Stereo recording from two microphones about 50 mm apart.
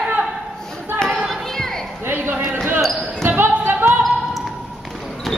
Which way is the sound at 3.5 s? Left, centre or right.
Right.